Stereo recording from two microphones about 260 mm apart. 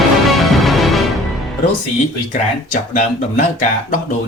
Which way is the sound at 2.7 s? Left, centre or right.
Left.